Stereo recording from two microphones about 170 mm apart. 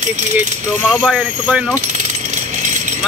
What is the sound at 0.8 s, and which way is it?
Speech, centre (ahead or behind).